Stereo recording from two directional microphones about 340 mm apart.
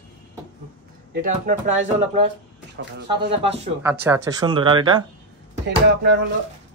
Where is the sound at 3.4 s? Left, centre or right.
Centre.